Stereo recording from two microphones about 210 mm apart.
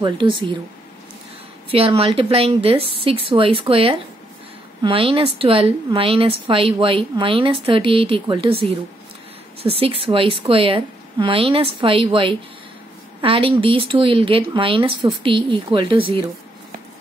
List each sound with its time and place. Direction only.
0.0 s a woman's voice: 25° right (ahead or behind)
1.7 s a woman's voice: 25° right (ahead or behind)